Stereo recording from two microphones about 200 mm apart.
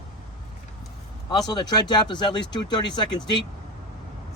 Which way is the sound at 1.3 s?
20° left (ahead or behind).